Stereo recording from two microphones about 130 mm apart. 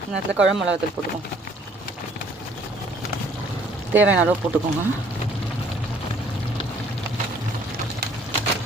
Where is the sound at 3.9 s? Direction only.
15° right (ahead or behind).